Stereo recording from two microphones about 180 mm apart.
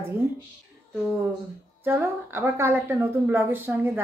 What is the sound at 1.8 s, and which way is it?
A woman's voice, 15° right (ahead or behind).